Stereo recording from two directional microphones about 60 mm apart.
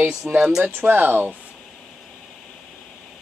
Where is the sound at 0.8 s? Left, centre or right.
Right.